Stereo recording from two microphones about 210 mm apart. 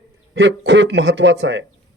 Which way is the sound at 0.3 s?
55° right (ahead or behind).